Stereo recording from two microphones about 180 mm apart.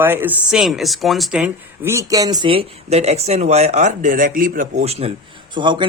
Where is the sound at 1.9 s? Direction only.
20° right (ahead or behind).